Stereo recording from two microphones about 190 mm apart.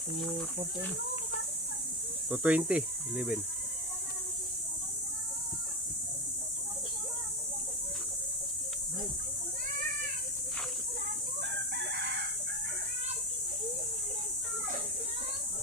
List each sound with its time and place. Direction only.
2.3 s speech: 5° right (ahead or behind)
11.7 s chicken: 65° right (ahead or behind)